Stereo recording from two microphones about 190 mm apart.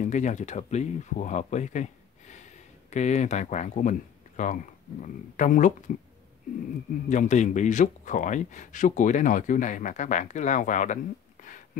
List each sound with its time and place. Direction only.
0.0 s a man's voice: 40° left (ahead or behind)
7.1 s a man's voice: 40° left (ahead or behind)